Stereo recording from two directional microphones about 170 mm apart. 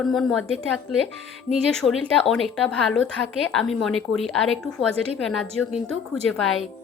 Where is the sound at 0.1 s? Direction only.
5° left (ahead or behind).